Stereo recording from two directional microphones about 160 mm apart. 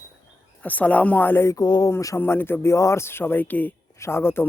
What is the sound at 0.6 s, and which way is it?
Speech, 10° left (ahead or behind).